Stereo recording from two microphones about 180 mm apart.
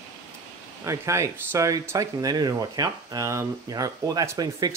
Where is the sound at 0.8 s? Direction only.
15° right (ahead or behind).